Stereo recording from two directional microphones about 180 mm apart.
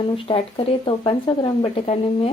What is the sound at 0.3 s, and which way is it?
Speech, 30° left (ahead or behind).